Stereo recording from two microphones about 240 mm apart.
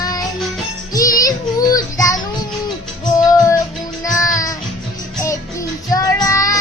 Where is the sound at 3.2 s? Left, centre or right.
Centre.